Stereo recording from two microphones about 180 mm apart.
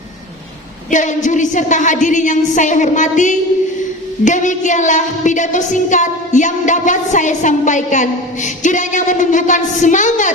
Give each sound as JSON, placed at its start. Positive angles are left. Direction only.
{"t": 0.9, "sound": "a woman's voice", "side_deg": 45}